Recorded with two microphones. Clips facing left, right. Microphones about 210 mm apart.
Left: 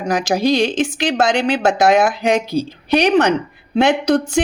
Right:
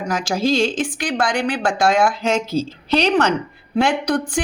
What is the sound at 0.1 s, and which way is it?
Speech, 20° left (ahead or behind).